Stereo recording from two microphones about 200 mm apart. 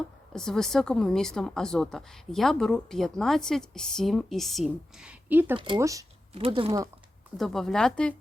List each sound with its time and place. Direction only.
0.3 s a woman's voice: centre (ahead or behind)
5.5 s speech: 20° right (ahead or behind)
6.3 s speech: 30° right (ahead or behind)
7.3 s a woman's voice: centre (ahead or behind)